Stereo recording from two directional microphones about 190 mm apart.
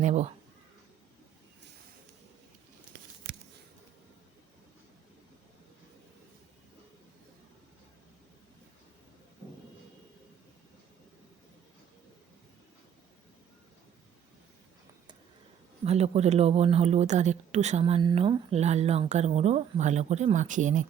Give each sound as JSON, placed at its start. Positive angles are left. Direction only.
{"t": 0.0, "sound": "speech", "side_deg": -35}
{"t": 15.8, "sound": "speech", "side_deg": -35}